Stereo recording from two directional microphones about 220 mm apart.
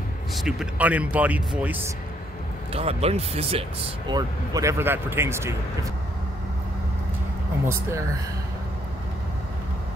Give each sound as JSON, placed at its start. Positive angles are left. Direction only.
{"t": 0.3, "sound": "speech", "side_deg": 0}
{"t": 2.7, "sound": "speech", "side_deg": -25}